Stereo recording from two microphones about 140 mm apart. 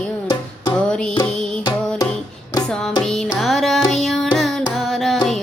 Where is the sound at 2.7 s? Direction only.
5° left (ahead or behind).